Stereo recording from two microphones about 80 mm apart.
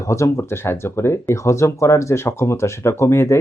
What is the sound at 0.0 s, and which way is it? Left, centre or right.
Speech, left.